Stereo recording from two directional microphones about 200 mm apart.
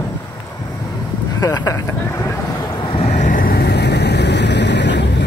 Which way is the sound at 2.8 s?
30° left (ahead or behind).